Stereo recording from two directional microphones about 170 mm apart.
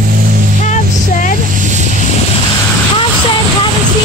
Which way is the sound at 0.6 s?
45° left (ahead or behind).